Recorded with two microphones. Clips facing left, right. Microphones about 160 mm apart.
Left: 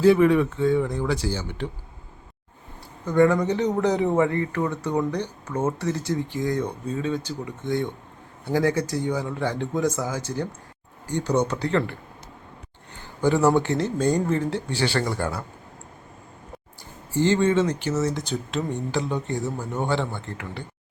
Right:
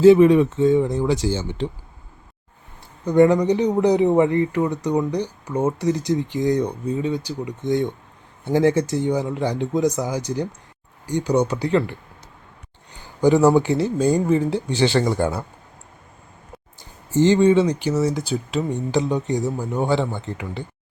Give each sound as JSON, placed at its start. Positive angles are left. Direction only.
{"t": 0.0, "sound": "speech", "side_deg": -20}
{"t": 3.0, "sound": "speech", "side_deg": -20}
{"t": 13.2, "sound": "speech", "side_deg": -15}
{"t": 17.1, "sound": "speech", "side_deg": -20}